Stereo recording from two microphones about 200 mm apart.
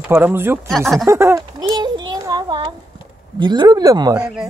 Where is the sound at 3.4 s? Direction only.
20° right (ahead or behind).